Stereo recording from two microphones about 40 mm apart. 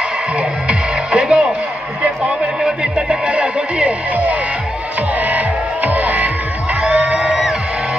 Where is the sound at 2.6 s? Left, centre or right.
Right.